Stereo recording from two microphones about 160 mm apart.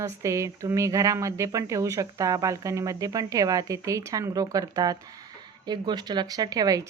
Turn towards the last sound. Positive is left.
turn(degrees=-25)  # may be behind; listen again after turning